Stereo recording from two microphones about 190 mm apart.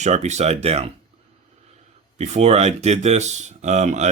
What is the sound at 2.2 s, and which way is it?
Speech, 35° right (ahead or behind).